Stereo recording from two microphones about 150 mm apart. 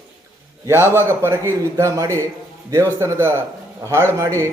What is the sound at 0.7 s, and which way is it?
A man's voice, 15° right (ahead or behind).